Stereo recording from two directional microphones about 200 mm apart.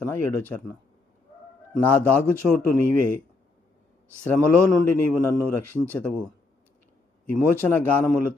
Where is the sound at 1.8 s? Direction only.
10° left (ahead or behind).